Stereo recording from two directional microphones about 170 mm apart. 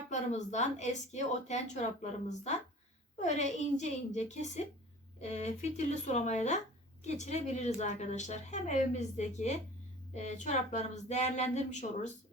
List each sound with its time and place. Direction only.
0.1 s a woman's voice: 45° left (ahead or behind)